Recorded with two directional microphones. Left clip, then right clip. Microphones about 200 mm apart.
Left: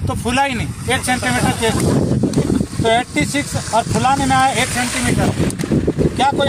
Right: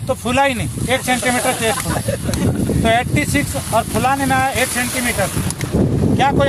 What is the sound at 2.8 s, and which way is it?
Speech, 10° right (ahead or behind).